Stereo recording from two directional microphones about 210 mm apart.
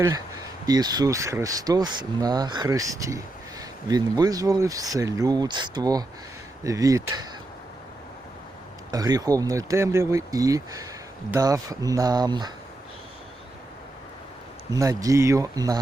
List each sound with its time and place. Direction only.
0.7 s speech: 20° right (ahead or behind)
8.9 s speech: 20° right (ahead or behind)
14.7 s speech: 15° right (ahead or behind)